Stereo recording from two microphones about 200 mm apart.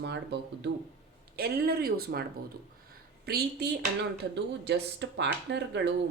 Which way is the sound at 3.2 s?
55° right (ahead or behind).